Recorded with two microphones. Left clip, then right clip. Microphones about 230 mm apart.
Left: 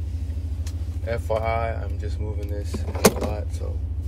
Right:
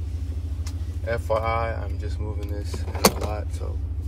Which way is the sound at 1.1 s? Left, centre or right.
Right.